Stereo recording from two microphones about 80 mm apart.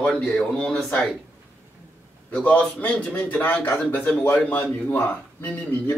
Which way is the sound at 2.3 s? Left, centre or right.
Centre.